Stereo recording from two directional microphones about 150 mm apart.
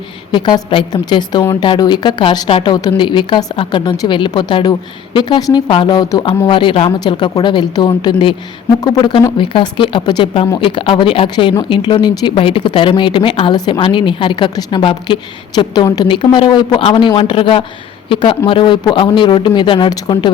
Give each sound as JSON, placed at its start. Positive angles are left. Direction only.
{"t": 0.3, "sound": "speech", "side_deg": 30}